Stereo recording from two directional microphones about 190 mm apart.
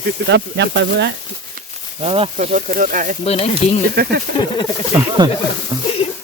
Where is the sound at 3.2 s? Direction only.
30° left (ahead or behind).